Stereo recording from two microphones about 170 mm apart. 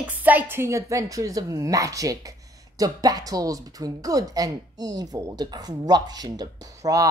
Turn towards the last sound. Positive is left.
turn(degrees=-20)  # may be behind; listen again after turning